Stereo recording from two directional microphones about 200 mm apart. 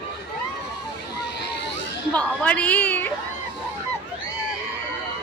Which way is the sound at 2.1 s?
5° left (ahead or behind).